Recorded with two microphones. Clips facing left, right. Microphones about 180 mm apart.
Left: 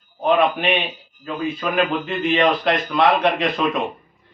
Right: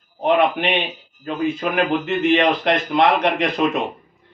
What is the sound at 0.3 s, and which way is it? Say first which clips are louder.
A man's voice: right 1 dB; 20° right (ahead or behind).